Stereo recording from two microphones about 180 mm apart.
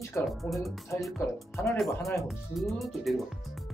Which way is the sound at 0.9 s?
15° left (ahead or behind).